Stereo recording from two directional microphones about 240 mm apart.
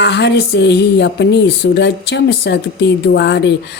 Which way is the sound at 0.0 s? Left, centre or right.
Left.